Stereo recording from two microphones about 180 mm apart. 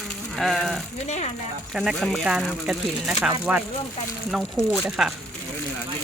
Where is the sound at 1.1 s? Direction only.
40° left (ahead or behind).